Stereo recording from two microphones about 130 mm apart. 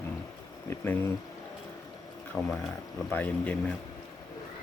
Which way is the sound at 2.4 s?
5° left (ahead or behind).